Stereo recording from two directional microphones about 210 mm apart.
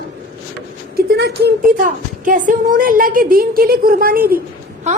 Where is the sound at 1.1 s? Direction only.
50° right (ahead or behind).